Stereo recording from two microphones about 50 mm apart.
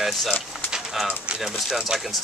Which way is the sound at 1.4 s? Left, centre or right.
Centre.